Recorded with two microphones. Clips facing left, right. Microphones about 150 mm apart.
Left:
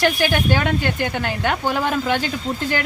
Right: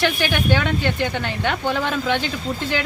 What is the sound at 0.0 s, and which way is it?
A woman's voice, 45° left (ahead or behind).